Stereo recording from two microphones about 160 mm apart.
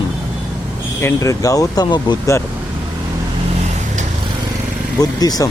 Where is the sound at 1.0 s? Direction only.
20° left (ahead or behind).